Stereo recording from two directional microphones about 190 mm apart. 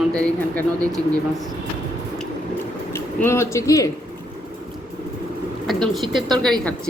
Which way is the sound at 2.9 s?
15° left (ahead or behind).